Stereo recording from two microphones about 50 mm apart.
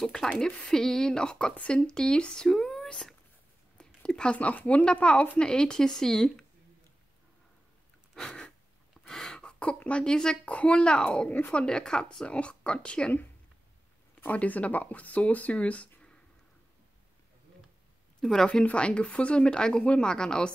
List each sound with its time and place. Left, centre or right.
0.5 s speech: left
0.7 s speech: centre
3.7 s speech: centre
5.4 s speech: centre
8.2 s a sound: centre
9.0 s throat clearing: centre
9.4 s speech: left
14.2 s speech: left
18.2 s speech: centre
18.5 s speech: left